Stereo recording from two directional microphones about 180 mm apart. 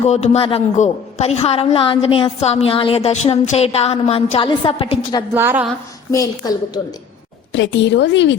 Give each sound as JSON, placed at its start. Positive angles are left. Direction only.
{"t": 0.0, "sound": "a woman's voice", "side_deg": 35}
{"t": 5.3, "sound": "a woman's voice", "side_deg": -10}
{"t": 6.1, "sound": "a woman's voice", "side_deg": 20}
{"t": 7.5, "sound": "speech", "side_deg": 85}